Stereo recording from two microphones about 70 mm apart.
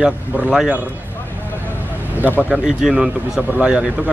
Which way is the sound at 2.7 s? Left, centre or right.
Centre.